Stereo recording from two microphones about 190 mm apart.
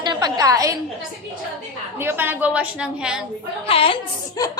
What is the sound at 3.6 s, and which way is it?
Speech, 30° left (ahead or behind).